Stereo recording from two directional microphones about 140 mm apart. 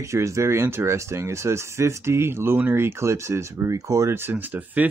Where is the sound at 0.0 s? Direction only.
20° right (ahead or behind).